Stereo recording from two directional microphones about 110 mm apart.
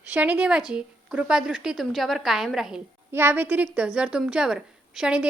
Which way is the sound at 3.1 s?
20° right (ahead or behind).